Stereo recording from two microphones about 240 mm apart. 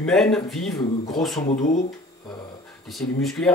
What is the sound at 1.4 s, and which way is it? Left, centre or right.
Speech, left.